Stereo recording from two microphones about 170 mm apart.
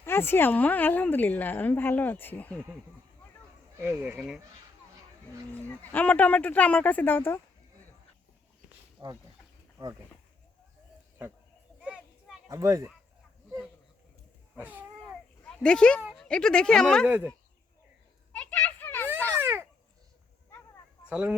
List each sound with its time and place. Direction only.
0.0 s a woman's voice: 15° left (ahead or behind)
3.8 s speech: 10° right (ahead or behind)
5.5 s a woman's voice: 10° left (ahead or behind)
9.0 s speech: 25° right (ahead or behind)
11.8 s a sound: 10° right (ahead or behind)
12.5 s speech: 20° right (ahead or behind)
14.5 s speech: 10° right (ahead or behind)
15.4 s speech: 5° left (ahead or behind)
17.1 s speech: 10° right (ahead or behind)
18.3 s a sound: 10° left (ahead or behind)
19.4 s a sound: 15° right (ahead or behind)
21.1 s speech: 10° right (ahead or behind)